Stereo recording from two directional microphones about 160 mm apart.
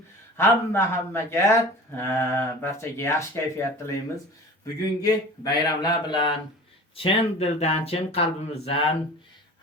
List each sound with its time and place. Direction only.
0.3 s speech: 15° left (ahead or behind); by 8.9 s 35° left (ahead or behind)